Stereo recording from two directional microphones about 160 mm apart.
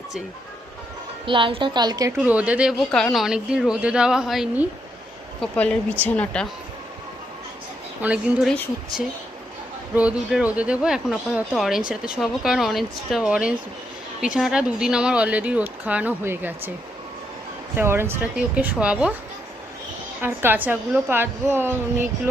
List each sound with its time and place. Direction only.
1.2 s a woman's voice: 30° right (ahead or behind)
2.1 s speech: 10° right (ahead or behind)
5.4 s speech: 5° left (ahead or behind)
8.0 s speech: 10° right (ahead or behind)
9.9 s speech: 10° right (ahead or behind)
17.7 s speech: 15° right (ahead or behind)
20.2 s speech: 10° right (ahead or behind)